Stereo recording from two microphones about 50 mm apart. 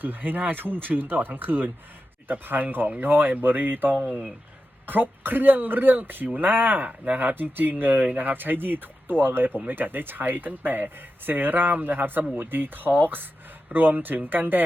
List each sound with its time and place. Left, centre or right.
0.0 s speech: right